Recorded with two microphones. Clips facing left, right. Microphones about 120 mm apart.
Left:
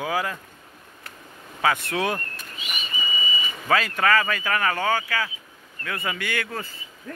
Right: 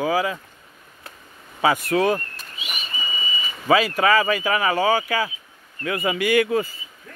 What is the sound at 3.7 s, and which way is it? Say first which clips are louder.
Speech: right 4 dB; 10° right (ahead or behind).